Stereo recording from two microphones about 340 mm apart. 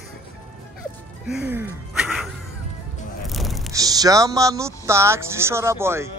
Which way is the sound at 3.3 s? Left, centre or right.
Centre.